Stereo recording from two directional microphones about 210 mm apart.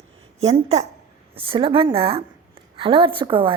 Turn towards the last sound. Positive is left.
turn(degrees=-25)  # may be behind; listen again after turning